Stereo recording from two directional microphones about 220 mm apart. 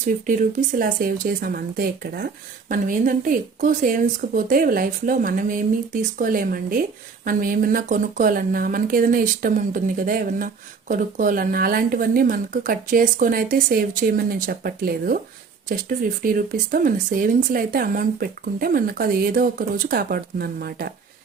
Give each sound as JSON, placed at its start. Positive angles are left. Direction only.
{"t": 0.3, "sound": "speech", "side_deg": -40}